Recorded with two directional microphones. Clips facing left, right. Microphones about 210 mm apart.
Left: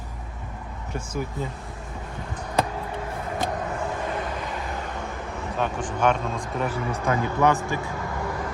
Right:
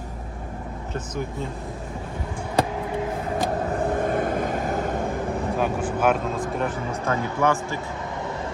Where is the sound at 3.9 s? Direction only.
50° right (ahead or behind).